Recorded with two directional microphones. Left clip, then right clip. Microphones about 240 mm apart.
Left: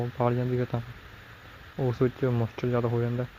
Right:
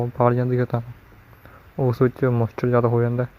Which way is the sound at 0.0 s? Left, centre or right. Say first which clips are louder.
Right 8 dB; right.